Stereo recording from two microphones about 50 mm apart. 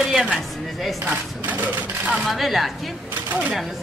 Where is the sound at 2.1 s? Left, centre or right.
Centre.